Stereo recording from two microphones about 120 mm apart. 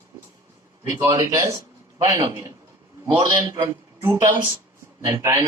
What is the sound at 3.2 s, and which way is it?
Speech, 35° right (ahead or behind).